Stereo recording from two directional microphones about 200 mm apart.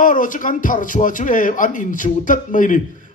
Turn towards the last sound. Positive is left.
turn(degrees=40)  # may be behind; listen again after turning